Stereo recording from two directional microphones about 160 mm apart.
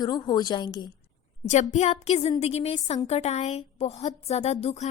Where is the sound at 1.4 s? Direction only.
45° left (ahead or behind).